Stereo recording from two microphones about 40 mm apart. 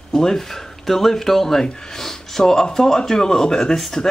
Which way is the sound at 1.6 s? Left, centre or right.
Centre.